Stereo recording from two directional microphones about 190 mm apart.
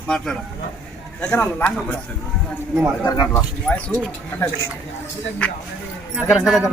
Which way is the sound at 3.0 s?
20° left (ahead or behind).